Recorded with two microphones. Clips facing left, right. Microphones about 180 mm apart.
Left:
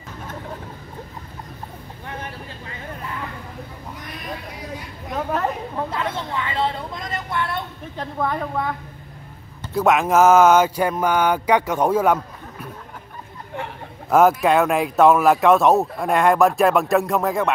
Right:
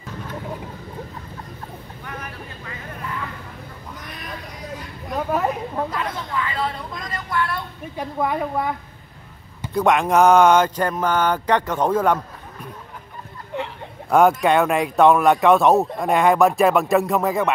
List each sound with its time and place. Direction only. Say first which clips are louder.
2.0 s vehicle: left 2 dB; 30° left (ahead or behind)
5.1 s speech: right 1 dB; 10° right (ahead or behind)
5.9 s vehicle: left 1 dB; 25° left (ahead or behind)
7.9 s a woman's voice: right 1 dB; 10° right (ahead or behind)
9.8 s mantra: even; 5° left (ahead or behind)
14.1 s speech: even; centre (ahead or behind)